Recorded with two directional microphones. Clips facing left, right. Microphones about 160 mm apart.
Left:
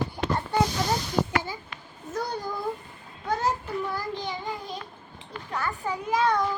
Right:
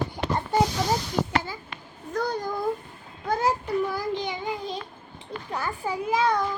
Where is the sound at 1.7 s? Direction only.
20° right (ahead or behind).